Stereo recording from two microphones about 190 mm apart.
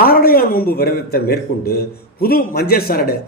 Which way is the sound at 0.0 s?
50° left (ahead or behind).